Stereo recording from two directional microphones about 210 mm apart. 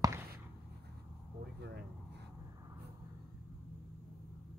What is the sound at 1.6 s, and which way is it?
Speech, 50° right (ahead or behind).